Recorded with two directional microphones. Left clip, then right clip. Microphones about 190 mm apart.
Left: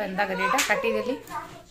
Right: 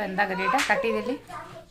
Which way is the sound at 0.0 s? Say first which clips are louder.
Even; 20° right (ahead or behind).